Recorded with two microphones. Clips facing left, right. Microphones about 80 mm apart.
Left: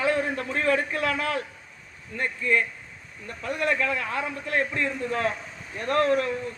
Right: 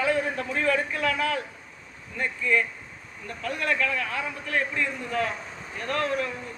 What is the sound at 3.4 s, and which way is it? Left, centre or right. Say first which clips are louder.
A man's voice: left 1 dB; left.